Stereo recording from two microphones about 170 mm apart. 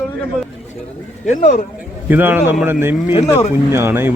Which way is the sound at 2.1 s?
10° right (ahead or behind).